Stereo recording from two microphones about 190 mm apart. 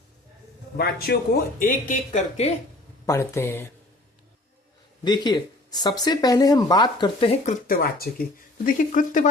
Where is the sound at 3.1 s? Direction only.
15° left (ahead or behind).